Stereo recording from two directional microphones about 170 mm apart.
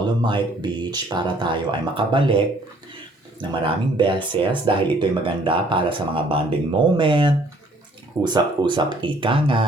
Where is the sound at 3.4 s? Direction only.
30° right (ahead or behind).